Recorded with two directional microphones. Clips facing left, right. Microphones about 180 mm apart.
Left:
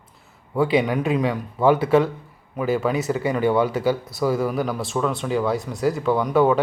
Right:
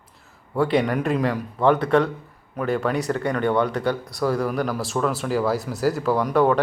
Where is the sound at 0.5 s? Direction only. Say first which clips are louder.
Left 1 dB; centre (ahead or behind).